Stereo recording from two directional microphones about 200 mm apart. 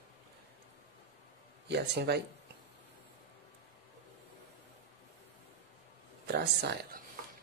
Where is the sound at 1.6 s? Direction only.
55° right (ahead or behind).